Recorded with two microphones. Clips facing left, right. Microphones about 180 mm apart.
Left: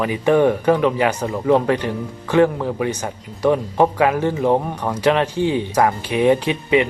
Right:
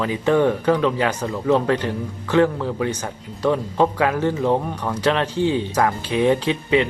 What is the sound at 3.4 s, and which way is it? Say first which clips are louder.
Speech: left 3 dB; 15° left (ahead or behind).